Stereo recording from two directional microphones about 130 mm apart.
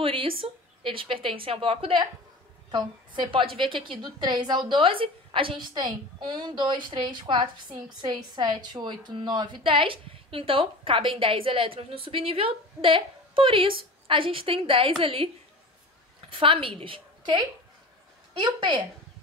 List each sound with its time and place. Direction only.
0.0 s a woman's voice: 45° right (ahead or behind)
16.3 s a woman's voice: 45° right (ahead or behind)
18.4 s a woman's voice: 35° right (ahead or behind)